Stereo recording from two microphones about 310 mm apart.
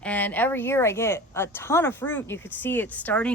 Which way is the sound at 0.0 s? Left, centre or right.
Centre.